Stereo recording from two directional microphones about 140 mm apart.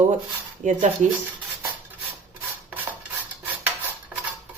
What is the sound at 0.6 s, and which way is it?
Speech, 65° right (ahead or behind).